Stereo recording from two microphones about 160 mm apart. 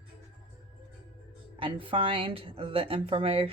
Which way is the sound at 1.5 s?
35° right (ahead or behind).